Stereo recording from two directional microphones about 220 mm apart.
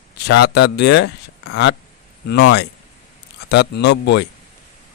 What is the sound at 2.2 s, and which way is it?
Speech, 50° left (ahead or behind).